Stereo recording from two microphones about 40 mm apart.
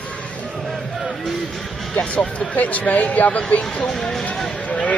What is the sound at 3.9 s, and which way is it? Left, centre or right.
Speech, centre.